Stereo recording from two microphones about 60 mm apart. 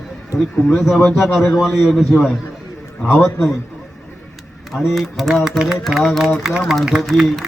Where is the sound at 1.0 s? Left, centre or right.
Centre.